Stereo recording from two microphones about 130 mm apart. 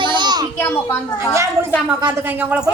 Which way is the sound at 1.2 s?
20° right (ahead or behind).